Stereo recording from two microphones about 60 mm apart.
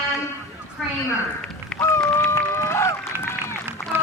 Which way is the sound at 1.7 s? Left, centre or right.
Centre.